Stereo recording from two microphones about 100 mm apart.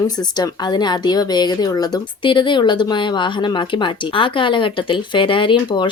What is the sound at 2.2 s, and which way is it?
Speech, 55° left (ahead or behind).